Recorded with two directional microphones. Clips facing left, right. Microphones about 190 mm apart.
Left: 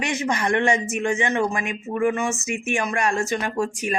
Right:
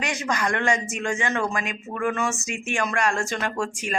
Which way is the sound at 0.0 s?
25° left (ahead or behind).